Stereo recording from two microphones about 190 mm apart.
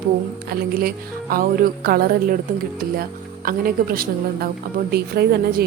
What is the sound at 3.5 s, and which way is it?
A woman's voice, 50° right (ahead or behind).